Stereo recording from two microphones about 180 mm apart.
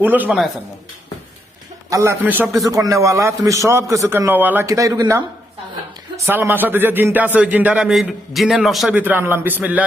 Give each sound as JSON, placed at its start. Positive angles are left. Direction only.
{"t": 0.0, "sound": "speech", "side_deg": -10}
{"t": 1.9, "sound": "speech", "side_deg": -15}